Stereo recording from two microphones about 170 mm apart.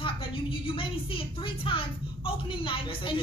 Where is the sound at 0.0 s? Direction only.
30° left (ahead or behind).